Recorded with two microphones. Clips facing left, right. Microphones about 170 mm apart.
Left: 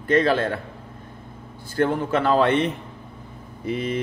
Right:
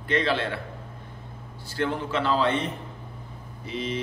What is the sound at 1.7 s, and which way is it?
Speech, 50° left (ahead or behind).